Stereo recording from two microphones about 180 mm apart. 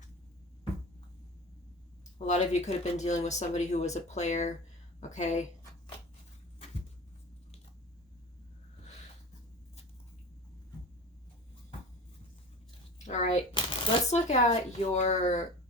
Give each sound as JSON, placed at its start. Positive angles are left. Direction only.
{"t": 2.1, "sound": "speech", "side_deg": 40}
{"t": 13.1, "sound": "speech", "side_deg": 40}